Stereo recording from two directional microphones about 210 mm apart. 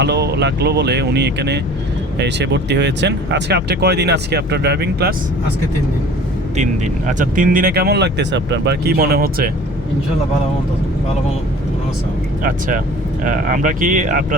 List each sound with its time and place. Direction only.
0.0 s speech: 50° right (ahead or behind)
6.6 s speech: 35° right (ahead or behind)
12.4 s speech: 40° right (ahead or behind)